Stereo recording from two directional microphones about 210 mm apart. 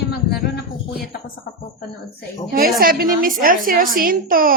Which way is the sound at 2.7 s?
45° right (ahead or behind).